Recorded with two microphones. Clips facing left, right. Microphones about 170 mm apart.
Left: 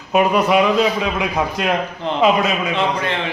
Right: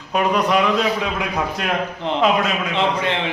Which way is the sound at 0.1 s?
5° left (ahead or behind).